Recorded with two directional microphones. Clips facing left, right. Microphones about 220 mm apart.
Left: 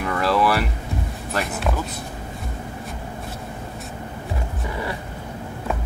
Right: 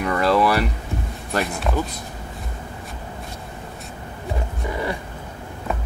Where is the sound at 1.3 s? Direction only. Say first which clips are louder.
Right 2 dB; centre (ahead or behind).